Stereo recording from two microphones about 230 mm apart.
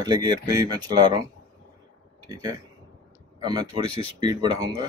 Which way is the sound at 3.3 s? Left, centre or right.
Centre.